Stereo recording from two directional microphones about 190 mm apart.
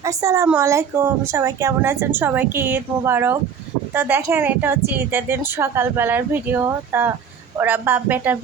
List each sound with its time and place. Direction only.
0.0 s a woman's voice: 15° right (ahead or behind)